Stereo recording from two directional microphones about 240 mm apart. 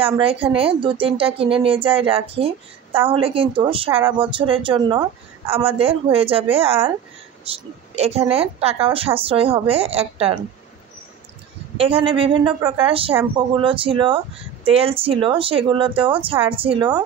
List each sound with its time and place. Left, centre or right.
0.0 s speech: right
11.7 s speech: right